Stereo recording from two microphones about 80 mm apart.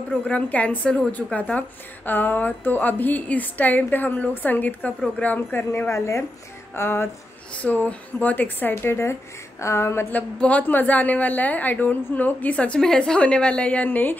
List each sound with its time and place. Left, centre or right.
0.3 s a woman's voice: centre
5.9 s speech: left
7.5 s a woman's voice: left
10.1 s a woman's voice: centre